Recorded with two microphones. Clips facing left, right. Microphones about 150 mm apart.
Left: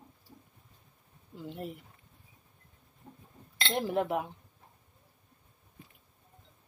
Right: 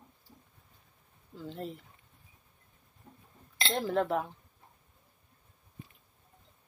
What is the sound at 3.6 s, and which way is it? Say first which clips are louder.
Speech: even; 15° left (ahead or behind).